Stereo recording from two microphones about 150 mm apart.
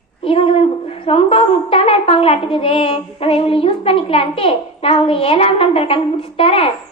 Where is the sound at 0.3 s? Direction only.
40° left (ahead or behind).